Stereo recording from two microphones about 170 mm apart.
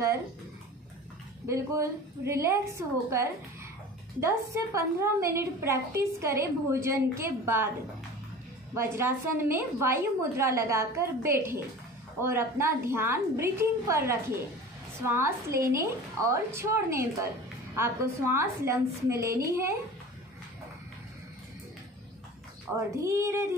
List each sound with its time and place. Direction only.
1.5 s a woman's voice: 15° right (ahead or behind)
4.7 s a woman's voice: 15° right (ahead or behind)
8.7 s a woman's voice: 15° right (ahead or behind)
23.0 s a woman's voice: 15° right (ahead or behind)